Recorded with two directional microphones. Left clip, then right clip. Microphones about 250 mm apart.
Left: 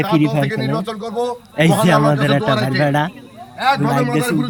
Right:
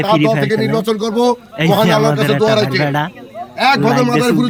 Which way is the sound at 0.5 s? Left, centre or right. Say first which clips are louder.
Right 6 dB; right.